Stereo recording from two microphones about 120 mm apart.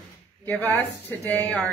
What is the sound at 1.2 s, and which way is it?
Speech, 15° left (ahead or behind).